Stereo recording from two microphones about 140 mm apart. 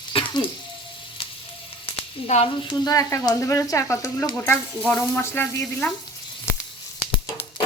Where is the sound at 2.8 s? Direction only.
25° left (ahead or behind).